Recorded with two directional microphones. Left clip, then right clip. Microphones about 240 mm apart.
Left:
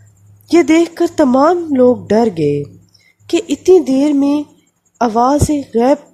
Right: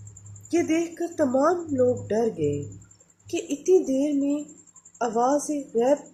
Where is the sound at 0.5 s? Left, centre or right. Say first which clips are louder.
Left 14 dB; left.